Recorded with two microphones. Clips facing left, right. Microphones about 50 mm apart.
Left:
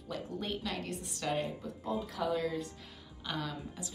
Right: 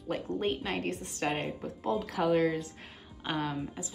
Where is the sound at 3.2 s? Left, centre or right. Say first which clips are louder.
Right 6 dB; right.